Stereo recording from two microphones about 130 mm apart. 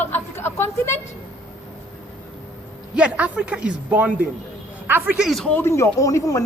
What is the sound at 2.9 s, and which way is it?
A man's voice, 10° right (ahead or behind).